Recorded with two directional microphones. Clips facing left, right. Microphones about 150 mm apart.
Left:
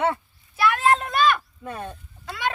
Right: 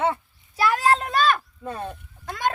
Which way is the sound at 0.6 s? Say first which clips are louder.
Even; 35° right (ahead or behind).